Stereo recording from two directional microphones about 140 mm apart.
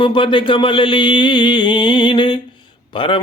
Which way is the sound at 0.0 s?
35° left (ahead or behind).